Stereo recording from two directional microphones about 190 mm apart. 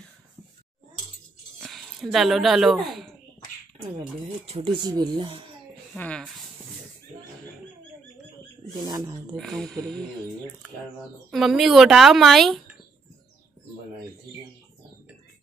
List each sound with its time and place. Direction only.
1.6 s speech: centre (ahead or behind)
4.5 s speech: 25° right (ahead or behind)
5.9 s speech: 5° left (ahead or behind)
8.7 s speech: 20° right (ahead or behind)
9.4 s speech: centre (ahead or behind)
11.2 s speech: centre (ahead or behind)